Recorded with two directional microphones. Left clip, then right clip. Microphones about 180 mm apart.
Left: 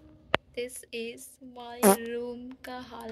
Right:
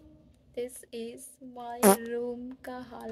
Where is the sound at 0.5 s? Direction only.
40° right (ahead or behind).